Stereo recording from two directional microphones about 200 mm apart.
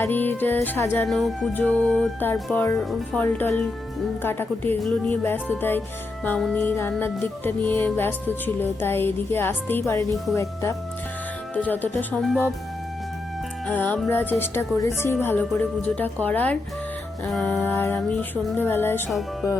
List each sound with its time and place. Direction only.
0.0 s music: 10° left (ahead or behind)
13.7 s music: 10° left (ahead or behind)